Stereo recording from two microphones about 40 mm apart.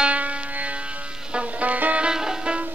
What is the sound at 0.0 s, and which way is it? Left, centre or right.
Music, right.